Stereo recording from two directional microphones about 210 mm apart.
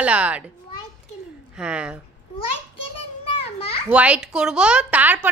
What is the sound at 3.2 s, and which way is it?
Children playing, 30° left (ahead or behind).